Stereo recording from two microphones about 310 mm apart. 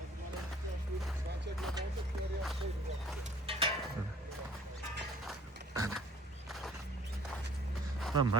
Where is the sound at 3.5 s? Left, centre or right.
Centre.